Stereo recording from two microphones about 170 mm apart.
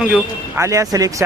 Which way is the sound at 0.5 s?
15° right (ahead or behind).